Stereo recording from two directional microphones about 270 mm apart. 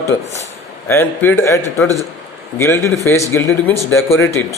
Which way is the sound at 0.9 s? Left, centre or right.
Centre.